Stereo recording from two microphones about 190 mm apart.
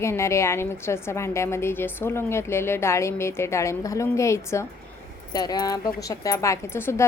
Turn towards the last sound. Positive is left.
turn(degrees=15)  # may be behind; listen again after turning